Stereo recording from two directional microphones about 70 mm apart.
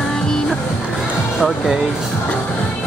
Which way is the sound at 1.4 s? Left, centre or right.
Centre.